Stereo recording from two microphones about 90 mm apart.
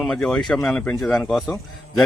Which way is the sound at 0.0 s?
5° left (ahead or behind).